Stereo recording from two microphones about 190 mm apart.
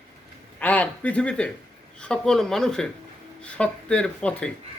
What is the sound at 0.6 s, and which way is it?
Speech, 10° left (ahead or behind).